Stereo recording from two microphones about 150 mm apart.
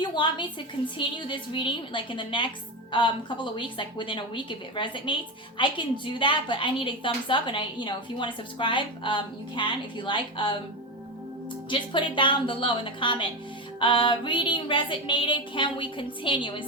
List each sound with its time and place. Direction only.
0.0 s a woman's voice: 30° left (ahead or behind)
11.7 s a woman's voice: 35° left (ahead or behind)